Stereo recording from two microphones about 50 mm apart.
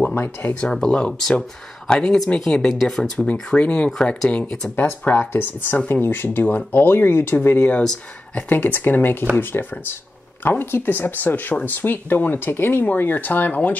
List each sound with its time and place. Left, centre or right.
0.1 s speech: left
0.6 s speech: centre
2.7 s speech: centre
3.5 s speech: left
4.0 s speech: centre
4.7 s speech: left
8.4 s speech: left
13.5 s speech: left